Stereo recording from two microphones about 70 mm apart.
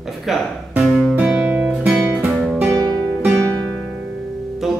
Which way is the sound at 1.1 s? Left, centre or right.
Right.